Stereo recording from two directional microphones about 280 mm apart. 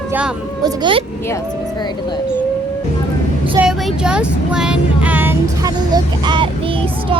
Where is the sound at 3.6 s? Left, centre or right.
Centre.